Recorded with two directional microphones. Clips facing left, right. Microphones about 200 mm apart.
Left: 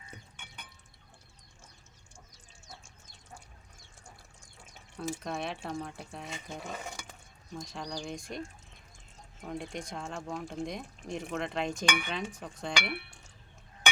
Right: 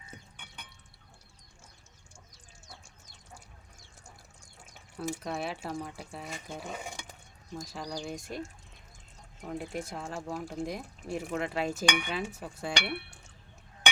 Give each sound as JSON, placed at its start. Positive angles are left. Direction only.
{"t": 5.2, "sound": "speech", "side_deg": -5}
{"t": 9.4, "sound": "speech", "side_deg": -5}